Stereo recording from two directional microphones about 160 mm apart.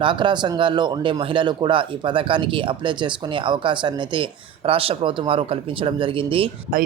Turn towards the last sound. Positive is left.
turn(degrees=-65)  # may be behind; listen again after turning